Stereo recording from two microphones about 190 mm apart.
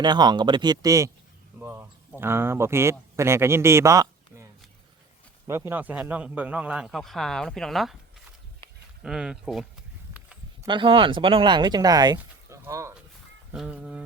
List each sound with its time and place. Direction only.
0.0 s a man's voice: 20° right (ahead or behind)
5.5 s a man's voice: 15° right (ahead or behind)
9.0 s a man's voice: 5° right (ahead or behind)
10.2 s a sound: 10° right (ahead or behind)
10.7 s a man's voice: 25° right (ahead or behind); by 14.0 s 5° right (ahead or behind)